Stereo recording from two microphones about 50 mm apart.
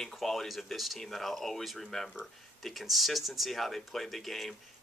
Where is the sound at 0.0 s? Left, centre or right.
Centre.